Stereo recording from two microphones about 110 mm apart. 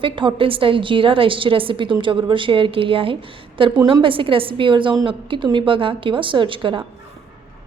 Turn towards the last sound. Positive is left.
turn(degrees=-50)  # may be behind; listen again after turning